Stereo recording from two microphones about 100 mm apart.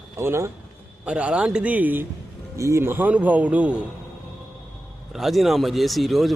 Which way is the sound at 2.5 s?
30° right (ahead or behind).